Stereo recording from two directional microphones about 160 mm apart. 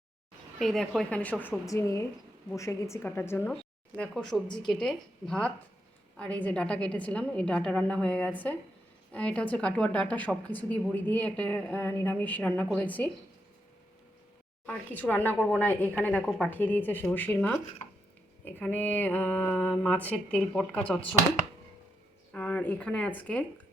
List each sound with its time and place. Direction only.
0.6 s a woman's voice: centre (ahead or behind)
14.7 s a woman's voice: 10° left (ahead or behind)
22.3 s speech: 10° left (ahead or behind)